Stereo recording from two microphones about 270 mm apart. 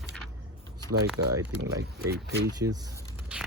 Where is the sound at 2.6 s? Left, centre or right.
Right.